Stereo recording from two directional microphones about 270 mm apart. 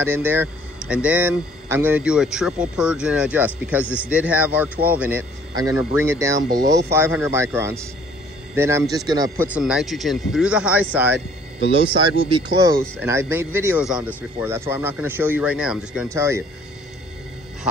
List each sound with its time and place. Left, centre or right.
0.0 s speech: centre
3.8 s a man's voice: centre
4.1 s a man's voice: centre
11.7 s a man's voice: centre